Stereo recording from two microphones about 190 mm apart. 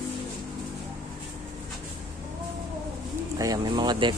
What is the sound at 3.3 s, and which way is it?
Speech, 20° right (ahead or behind).